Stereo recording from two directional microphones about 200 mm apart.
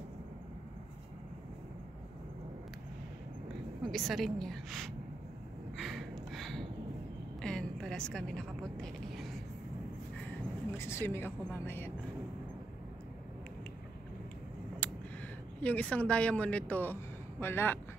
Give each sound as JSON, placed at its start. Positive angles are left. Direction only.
{"t": 3.8, "sound": "a woman's voice", "side_deg": 0}
{"t": 5.8, "sound": "a sound", "side_deg": 0}
{"t": 7.4, "sound": "a woman's voice", "side_deg": 5}
{"t": 10.8, "sound": "a woman's voice", "side_deg": 10}
{"t": 14.8, "sound": "a sound", "side_deg": 5}
{"t": 15.6, "sound": "speech", "side_deg": 5}